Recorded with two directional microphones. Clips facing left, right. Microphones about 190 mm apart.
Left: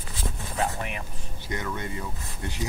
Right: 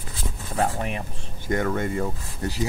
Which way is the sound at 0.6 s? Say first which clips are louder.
Right 4 dB; 35° right (ahead or behind).